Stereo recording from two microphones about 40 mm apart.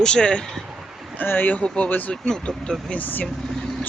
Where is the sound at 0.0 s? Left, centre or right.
Left.